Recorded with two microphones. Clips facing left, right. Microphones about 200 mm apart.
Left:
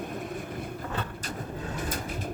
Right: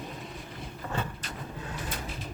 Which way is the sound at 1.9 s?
50° left (ahead or behind).